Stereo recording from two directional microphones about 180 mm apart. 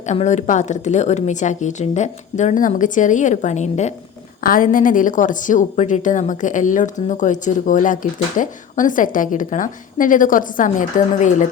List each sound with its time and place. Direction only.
0.0 s a woman's voice: 40° left (ahead or behind)
4.4 s a woman's voice: 50° left (ahead or behind)